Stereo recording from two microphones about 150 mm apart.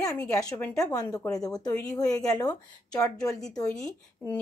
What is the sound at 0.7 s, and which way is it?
A woman's voice, 25° left (ahead or behind).